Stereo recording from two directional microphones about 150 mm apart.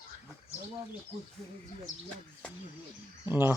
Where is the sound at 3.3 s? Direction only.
15° right (ahead or behind).